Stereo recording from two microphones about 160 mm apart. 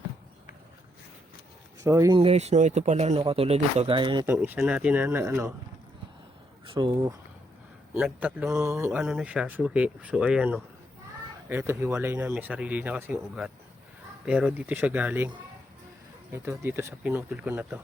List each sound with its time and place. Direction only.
1.8 s speech: 20° right (ahead or behind)
2.1 s speech: 40° right (ahead or behind)
4.3 s speech: 10° right (ahead or behind)
6.7 s speech: 25° right (ahead or behind)
8.0 s speech: 10° right (ahead or behind)
16.3 s speech: 15° right (ahead or behind)